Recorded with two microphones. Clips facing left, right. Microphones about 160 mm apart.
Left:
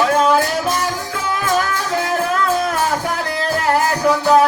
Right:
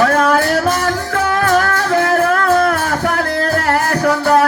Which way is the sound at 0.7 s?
50° right (ahead or behind).